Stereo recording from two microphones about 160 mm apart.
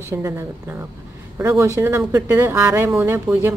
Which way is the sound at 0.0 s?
15° right (ahead or behind).